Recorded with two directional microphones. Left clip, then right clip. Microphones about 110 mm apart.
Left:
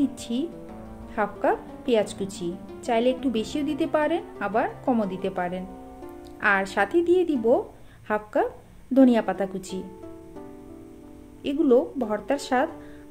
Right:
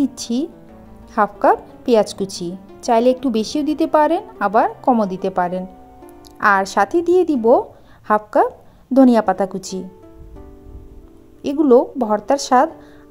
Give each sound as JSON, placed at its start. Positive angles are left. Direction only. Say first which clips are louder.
{"t": 0.2, "sound": "a woman's voice", "louder": "right 7 dB", "side_deg": -90}
{"t": 11.4, "sound": "a woman's voice", "louder": "right 8 dB", "side_deg": -60}